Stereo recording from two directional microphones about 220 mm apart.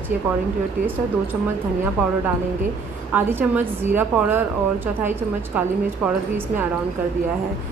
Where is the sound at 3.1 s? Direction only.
10° right (ahead or behind).